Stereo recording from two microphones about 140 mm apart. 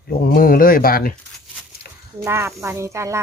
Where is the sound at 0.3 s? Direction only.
90° left.